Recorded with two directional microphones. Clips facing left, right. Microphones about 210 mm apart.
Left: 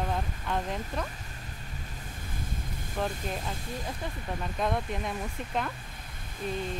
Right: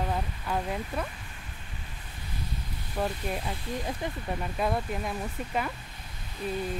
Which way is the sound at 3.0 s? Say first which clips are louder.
Right 2 dB; 5° right (ahead or behind).